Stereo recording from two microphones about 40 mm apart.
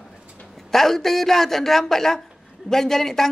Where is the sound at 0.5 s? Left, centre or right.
Centre.